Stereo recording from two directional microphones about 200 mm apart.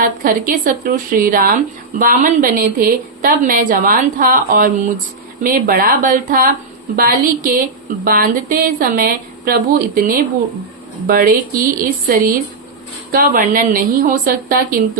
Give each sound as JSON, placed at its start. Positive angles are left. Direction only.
{"t": 0.0, "sound": "a woman's voice", "side_deg": -40}